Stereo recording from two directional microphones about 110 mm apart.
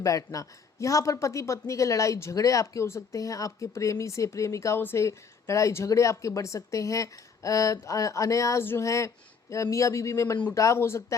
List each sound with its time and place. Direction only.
0.0 s speech: 30° left (ahead or behind)